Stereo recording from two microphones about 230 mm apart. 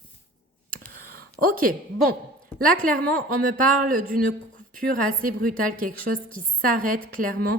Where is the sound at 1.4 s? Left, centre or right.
Right.